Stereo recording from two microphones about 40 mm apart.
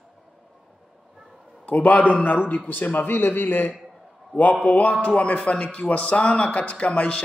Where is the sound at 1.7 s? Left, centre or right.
Left.